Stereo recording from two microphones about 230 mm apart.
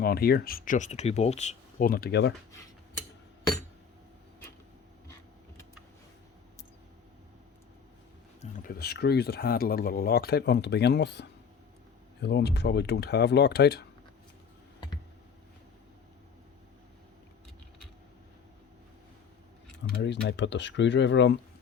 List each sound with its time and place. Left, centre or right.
0.0 s speech: left
8.4 s speech: left
20.0 s speech: left